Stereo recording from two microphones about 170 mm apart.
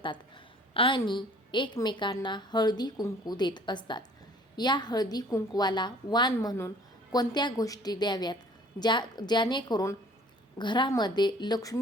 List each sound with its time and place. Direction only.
0.7 s a woman's voice: 30° left (ahead or behind)